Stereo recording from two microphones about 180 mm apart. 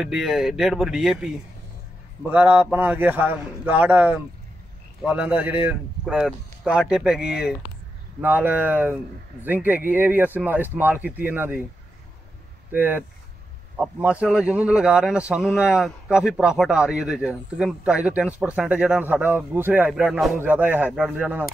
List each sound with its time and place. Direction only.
0.0 s a man's voice: centre (ahead or behind)
12.7 s a man's voice: 10° right (ahead or behind)